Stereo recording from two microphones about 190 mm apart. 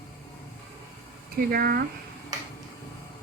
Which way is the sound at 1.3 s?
50° right (ahead or behind).